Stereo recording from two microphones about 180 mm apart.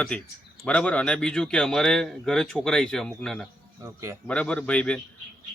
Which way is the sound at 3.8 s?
15° right (ahead or behind).